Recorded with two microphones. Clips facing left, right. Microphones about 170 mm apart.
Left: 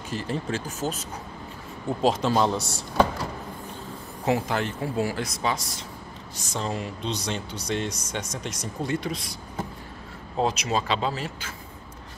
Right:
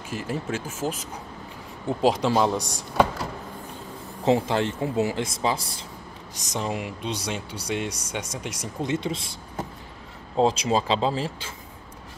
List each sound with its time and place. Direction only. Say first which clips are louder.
0.1 s speech: even; 5° right (ahead or behind)
4.2 s speech: right 3 dB; 25° right (ahead or behind)
6.5 s speech: right 1 dB; 15° right (ahead or behind)
8.8 s speech: right 2 dB; 25° right (ahead or behind)